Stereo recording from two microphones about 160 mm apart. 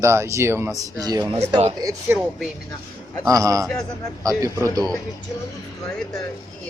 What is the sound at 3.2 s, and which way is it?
Speech, 20° right (ahead or behind).